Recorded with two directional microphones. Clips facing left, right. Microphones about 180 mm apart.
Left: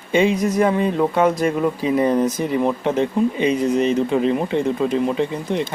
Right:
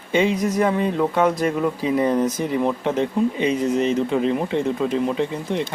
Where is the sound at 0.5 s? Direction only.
25° left (ahead or behind).